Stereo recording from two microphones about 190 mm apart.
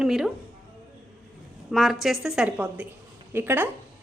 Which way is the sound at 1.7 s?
Centre (ahead or behind).